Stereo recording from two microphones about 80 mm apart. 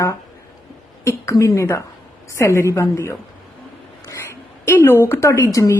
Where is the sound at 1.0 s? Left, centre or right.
Left.